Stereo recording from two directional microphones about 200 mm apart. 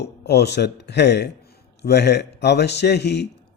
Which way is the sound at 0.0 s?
55° left (ahead or behind).